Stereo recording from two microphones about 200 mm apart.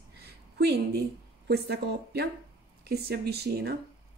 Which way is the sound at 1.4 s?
55° right (ahead or behind).